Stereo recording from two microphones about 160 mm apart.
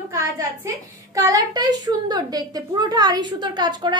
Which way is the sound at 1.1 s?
20° right (ahead or behind).